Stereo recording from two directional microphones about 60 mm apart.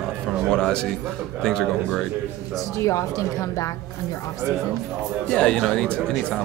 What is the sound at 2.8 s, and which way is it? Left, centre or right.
Speech, left.